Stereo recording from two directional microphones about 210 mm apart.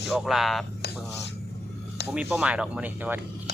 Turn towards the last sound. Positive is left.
turn(degrees=-10)  # may be behind; listen again after turning